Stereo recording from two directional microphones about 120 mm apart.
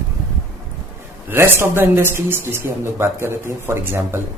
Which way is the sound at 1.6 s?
20° right (ahead or behind).